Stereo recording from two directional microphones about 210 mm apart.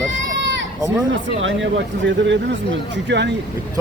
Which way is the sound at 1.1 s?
65° right (ahead or behind).